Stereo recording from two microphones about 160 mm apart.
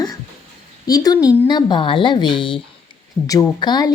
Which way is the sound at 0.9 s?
25° left (ahead or behind).